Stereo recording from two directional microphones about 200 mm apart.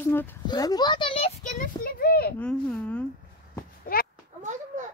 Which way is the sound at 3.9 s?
45° left (ahead or behind).